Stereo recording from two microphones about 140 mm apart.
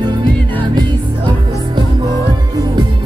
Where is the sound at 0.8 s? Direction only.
35° right (ahead or behind).